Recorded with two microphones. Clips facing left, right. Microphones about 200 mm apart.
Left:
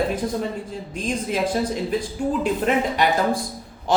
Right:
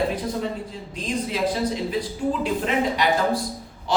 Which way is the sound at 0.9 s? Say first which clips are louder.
Left 2 dB; 50° left (ahead or behind).